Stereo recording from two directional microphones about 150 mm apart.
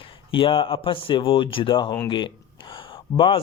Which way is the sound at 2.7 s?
35° left (ahead or behind).